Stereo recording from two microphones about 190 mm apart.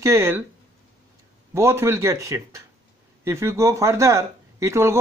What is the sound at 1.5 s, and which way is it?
Speech, 15° right (ahead or behind).